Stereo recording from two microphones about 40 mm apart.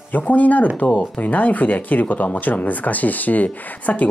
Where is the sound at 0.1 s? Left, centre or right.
Left.